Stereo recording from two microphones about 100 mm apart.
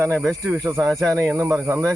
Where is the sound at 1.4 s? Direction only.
30° right (ahead or behind).